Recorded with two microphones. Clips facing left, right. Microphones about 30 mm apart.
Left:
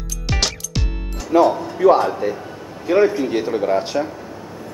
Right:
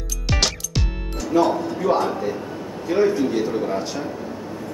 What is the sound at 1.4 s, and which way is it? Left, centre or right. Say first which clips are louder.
Speech: left 4 dB; centre.